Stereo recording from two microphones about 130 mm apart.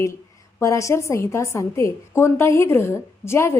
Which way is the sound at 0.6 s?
25° left (ahead or behind).